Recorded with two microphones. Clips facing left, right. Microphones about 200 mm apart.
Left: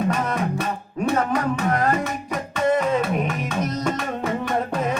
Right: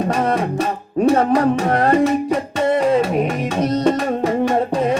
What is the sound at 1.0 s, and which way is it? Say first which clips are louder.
Music: right 7 dB; 35° right (ahead or behind).